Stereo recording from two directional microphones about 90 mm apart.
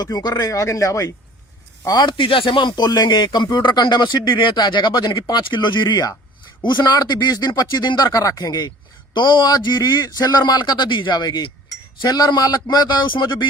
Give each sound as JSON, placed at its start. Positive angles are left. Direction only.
{"t": 0.0, "sound": "speech", "side_deg": 50}
{"t": 1.9, "sound": "a man's voice", "side_deg": 55}
{"t": 9.1, "sound": "a man's voice", "side_deg": 60}